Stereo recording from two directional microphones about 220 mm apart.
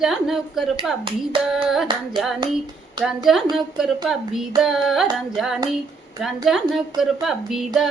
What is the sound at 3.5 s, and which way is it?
A woman's voice, centre (ahead or behind).